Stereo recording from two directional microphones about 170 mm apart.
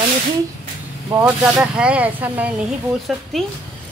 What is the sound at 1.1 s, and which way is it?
Speech, 10° right (ahead or behind).